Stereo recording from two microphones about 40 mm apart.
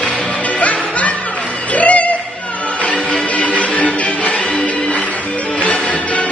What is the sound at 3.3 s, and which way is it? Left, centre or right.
Music, left.